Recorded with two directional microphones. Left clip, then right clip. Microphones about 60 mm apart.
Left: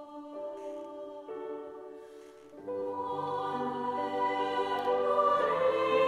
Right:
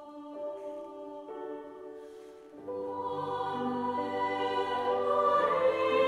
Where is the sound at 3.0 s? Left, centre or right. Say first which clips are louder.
Even; centre.